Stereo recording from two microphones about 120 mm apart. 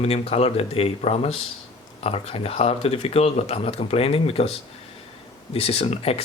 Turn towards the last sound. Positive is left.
turn(degrees=55)  # may be behind; listen again after turning